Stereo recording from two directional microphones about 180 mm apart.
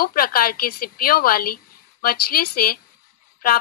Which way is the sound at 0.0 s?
55° left (ahead or behind).